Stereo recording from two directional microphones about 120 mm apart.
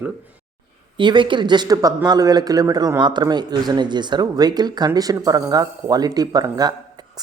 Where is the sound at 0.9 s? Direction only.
40° right (ahead or behind).